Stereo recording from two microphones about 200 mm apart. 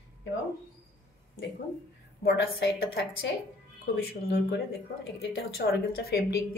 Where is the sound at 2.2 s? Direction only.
60° left (ahead or behind).